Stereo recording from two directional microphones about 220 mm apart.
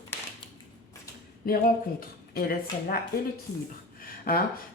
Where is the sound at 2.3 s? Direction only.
40° left (ahead or behind).